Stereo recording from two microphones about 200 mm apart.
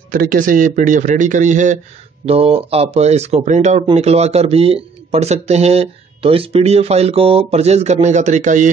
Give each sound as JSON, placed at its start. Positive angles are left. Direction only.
{"t": 0.1, "sound": "speech", "side_deg": -45}